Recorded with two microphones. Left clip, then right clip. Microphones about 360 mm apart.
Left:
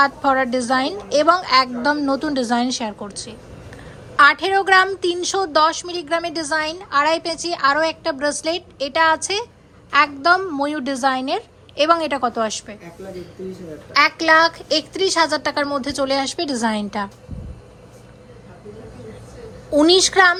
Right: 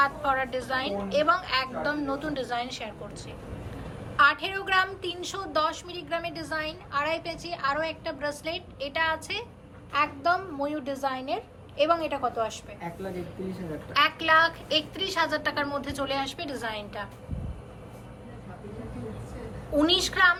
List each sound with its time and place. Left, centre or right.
0.0 s a woman's voice: centre
4.2 s a woman's voice: centre
13.9 s a woman's voice: centre
19.7 s a woman's voice: centre